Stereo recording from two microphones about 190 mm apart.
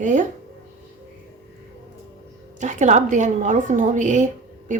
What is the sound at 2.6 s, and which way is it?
A woman's voice, 40° right (ahead or behind).